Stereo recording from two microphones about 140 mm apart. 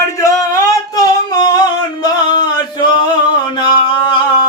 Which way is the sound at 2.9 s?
30° left (ahead or behind).